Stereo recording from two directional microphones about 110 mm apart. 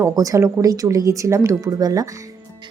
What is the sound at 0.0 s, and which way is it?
Speech, 30° right (ahead or behind).